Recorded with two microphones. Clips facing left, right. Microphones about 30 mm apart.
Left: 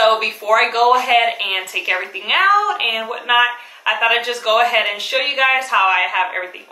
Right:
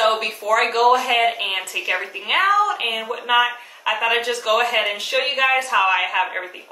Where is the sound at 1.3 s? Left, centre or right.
Left.